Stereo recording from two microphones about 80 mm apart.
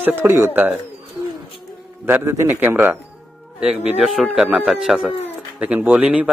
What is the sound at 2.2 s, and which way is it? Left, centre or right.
Speech, right.